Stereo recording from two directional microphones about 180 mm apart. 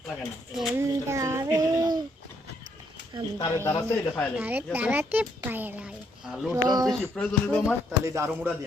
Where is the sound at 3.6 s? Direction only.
15° left (ahead or behind).